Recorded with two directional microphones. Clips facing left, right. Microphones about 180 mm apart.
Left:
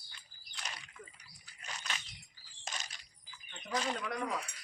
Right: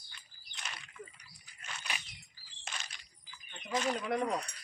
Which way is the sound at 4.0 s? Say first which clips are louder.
Right 5 dB; 25° right (ahead or behind).